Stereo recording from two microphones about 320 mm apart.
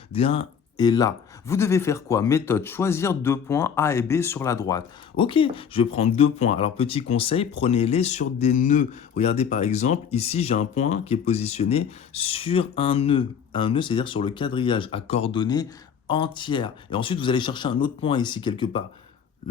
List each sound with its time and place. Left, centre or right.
0.1 s speech: centre